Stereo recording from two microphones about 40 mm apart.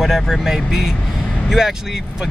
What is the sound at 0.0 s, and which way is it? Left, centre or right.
Speech, centre.